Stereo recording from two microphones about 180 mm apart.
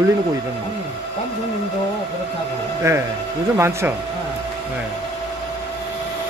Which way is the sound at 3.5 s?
15° right (ahead or behind).